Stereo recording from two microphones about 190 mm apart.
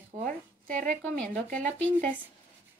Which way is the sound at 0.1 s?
35° right (ahead or behind).